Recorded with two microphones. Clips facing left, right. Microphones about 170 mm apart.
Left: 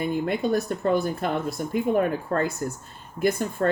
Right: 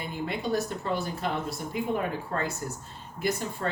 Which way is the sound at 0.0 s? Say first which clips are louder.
Left 7 dB; 50° left (ahead or behind).